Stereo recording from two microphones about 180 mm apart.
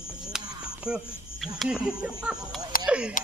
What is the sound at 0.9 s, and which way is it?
Speech, 5° right (ahead or behind).